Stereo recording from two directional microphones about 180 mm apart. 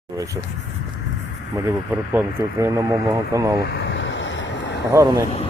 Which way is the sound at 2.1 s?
15° right (ahead or behind).